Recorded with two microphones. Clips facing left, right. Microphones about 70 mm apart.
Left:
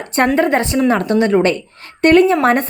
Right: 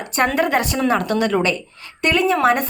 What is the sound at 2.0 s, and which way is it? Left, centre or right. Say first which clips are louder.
Speech: left 6 dB; left.